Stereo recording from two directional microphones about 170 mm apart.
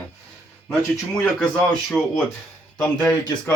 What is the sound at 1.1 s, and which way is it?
Speech, 5° left (ahead or behind).